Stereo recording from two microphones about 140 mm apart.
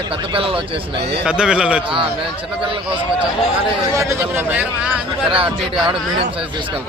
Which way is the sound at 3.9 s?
20° right (ahead or behind).